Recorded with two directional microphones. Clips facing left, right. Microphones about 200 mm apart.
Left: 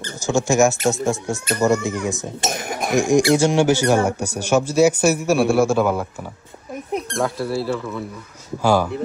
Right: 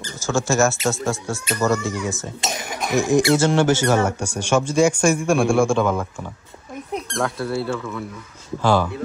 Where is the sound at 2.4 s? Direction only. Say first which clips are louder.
Left 3 dB; 55° left (ahead or behind).